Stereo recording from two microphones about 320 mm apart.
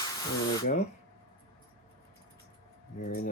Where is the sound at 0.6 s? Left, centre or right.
Left.